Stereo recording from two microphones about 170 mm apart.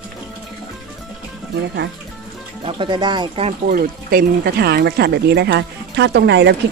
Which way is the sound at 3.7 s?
60° right (ahead or behind).